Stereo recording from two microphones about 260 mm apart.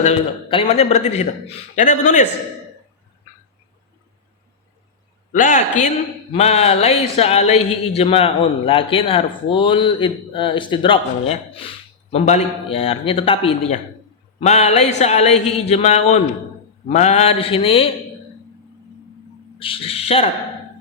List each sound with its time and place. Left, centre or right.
0.0 s speech: left
5.3 s speech: left
19.5 s speech: left